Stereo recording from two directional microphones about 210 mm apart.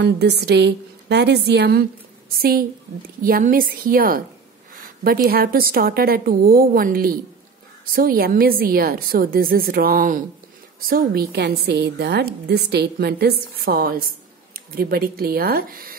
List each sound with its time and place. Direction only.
0.0 s a woman's voice: 55° right (ahead or behind)